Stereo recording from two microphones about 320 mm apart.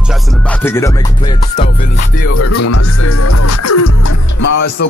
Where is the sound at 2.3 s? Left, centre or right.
Left.